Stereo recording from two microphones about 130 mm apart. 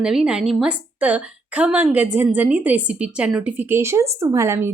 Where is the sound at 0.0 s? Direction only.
5° right (ahead or behind).